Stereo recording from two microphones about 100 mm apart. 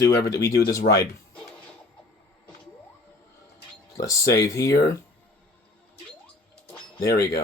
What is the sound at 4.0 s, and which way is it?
Speech, 30° left (ahead or behind).